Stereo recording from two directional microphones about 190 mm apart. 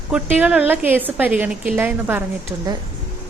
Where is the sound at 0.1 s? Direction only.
5° right (ahead or behind).